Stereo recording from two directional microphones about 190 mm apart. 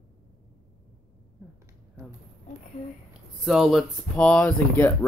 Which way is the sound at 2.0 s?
15° right (ahead or behind).